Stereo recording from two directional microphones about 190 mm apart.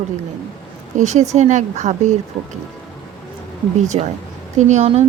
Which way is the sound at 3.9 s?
30° right (ahead or behind).